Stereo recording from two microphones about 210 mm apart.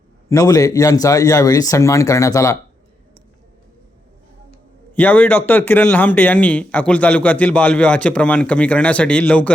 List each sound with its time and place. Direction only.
0.3 s speech: 15° left (ahead or behind)
4.9 s a man's voice: 5° left (ahead or behind)